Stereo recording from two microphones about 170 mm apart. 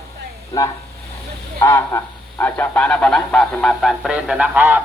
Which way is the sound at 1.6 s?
15° left (ahead or behind).